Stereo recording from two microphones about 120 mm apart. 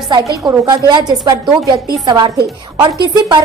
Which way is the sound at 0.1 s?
30° right (ahead or behind).